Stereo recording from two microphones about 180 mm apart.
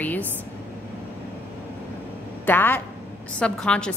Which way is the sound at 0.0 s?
10° left (ahead or behind).